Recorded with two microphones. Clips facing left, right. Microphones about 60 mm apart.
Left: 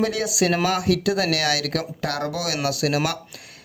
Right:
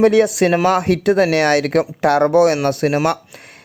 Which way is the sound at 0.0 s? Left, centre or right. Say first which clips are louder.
Right 10 dB; right.